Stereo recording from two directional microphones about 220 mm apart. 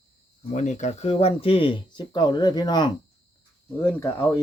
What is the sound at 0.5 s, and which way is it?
Speech, 30° left (ahead or behind).